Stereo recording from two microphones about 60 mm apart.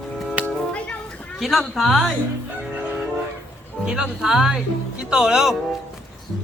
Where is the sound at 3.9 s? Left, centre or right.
Centre.